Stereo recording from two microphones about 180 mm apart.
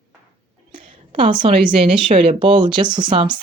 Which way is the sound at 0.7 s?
30° right (ahead or behind).